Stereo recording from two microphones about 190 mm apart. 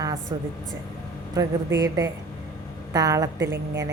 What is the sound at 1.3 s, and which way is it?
Speech, 20° right (ahead or behind).